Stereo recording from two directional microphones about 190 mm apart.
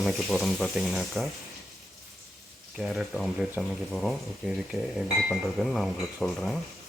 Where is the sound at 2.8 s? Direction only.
Centre (ahead or behind).